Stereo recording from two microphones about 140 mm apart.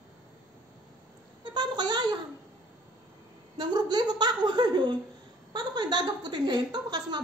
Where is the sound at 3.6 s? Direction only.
30° right (ahead or behind).